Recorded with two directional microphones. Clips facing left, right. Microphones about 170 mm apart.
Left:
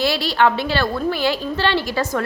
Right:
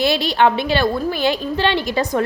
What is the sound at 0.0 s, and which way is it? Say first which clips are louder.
A woman's voice: right 2 dB; 20° right (ahead or behind).